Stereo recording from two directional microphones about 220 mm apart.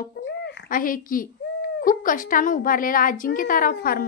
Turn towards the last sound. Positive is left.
turn(degrees=40)  # may be behind; listen again after turning